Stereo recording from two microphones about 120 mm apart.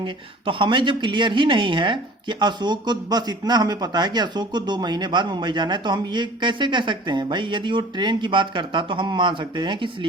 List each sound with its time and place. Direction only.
0.0 s speech: 45° right (ahead or behind)